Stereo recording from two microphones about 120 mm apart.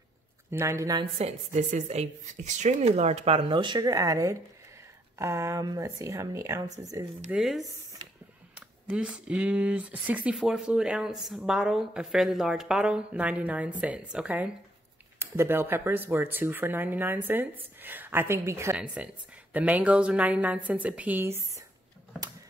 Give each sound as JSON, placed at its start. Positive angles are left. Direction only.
{"t": 0.5, "sound": "speech", "side_deg": -20}
{"t": 1.1, "sound": "a woman's voice", "side_deg": -75}
{"t": 7.2, "sound": "speech", "side_deg": -5}
{"t": 19.0, "sound": "speech", "side_deg": -10}